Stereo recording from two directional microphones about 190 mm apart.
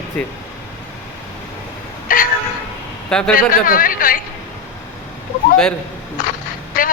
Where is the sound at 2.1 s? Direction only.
45° left (ahead or behind).